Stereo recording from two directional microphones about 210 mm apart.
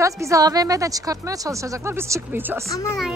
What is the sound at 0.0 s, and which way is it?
Speech, 15° right (ahead or behind).